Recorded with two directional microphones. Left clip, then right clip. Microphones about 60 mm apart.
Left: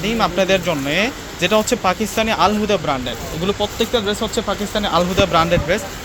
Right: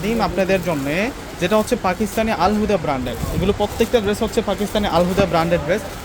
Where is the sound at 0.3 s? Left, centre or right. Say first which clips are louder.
Left 2 dB; centre.